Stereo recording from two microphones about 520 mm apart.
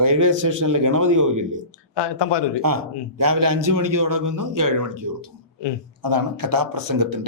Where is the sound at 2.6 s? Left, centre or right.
Right.